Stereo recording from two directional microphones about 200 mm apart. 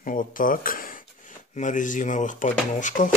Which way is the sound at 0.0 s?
40° left (ahead or behind).